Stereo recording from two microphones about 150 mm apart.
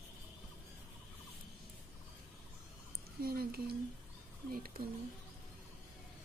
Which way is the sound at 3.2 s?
90° right.